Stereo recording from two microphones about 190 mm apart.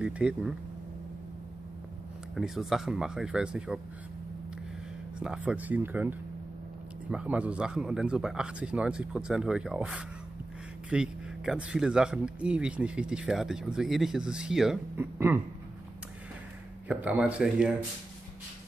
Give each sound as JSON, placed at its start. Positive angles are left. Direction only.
{"t": 0.0, "sound": "speech", "side_deg": -5}
{"t": 2.3, "sound": "speech", "side_deg": 0}
{"t": 5.2, "sound": "speech", "side_deg": -5}
{"t": 16.8, "sound": "speech", "side_deg": -5}